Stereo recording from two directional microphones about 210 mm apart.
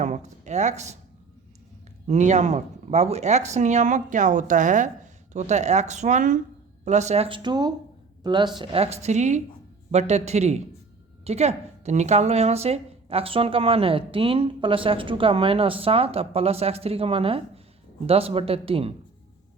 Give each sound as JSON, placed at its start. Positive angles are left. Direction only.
{"t": 0.0, "sound": "speech", "side_deg": -35}
{"t": 2.0, "sound": "a woman's voice", "side_deg": -35}